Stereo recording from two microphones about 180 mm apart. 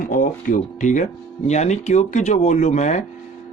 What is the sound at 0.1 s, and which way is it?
Speech, 50° left (ahead or behind).